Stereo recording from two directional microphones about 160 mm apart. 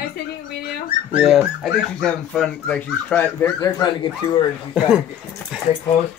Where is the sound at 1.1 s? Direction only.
Centre (ahead or behind); by 3.5 s 15° left (ahead or behind).